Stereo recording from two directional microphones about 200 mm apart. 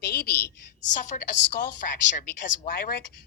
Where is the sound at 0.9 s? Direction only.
40° left (ahead or behind).